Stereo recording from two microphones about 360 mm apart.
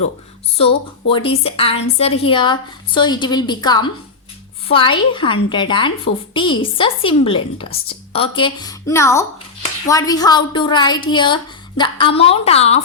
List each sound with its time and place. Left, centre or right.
0.5 s speech: centre